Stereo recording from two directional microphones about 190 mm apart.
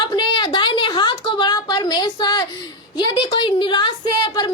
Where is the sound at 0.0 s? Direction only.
20° left (ahead or behind).